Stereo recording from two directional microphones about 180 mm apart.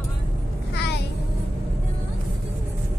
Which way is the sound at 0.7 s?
70° left (ahead or behind).